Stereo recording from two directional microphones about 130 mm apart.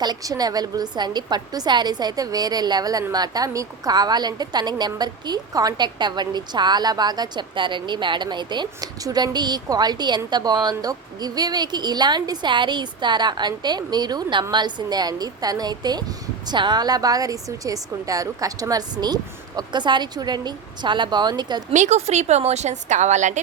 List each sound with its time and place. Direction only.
0.0 s a woman's voice: 30° right (ahead or behind)
21.7 s a woman's voice: 65° right (ahead or behind)